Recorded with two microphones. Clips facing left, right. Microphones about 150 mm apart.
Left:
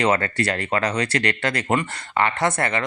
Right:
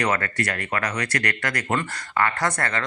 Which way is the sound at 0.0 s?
25° left (ahead or behind).